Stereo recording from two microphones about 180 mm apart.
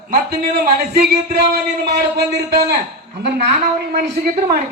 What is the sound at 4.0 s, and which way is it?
Speech, 70° right (ahead or behind).